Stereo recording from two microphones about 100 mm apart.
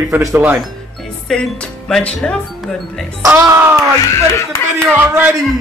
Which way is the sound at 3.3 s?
35° right (ahead or behind).